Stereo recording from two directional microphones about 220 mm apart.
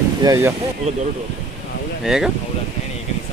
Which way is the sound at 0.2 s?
15° right (ahead or behind).